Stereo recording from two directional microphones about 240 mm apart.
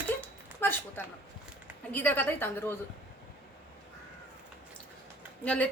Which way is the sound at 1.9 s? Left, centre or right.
Centre.